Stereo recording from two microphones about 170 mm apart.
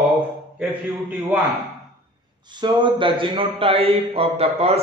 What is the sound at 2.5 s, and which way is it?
A man's voice, 25° right (ahead or behind).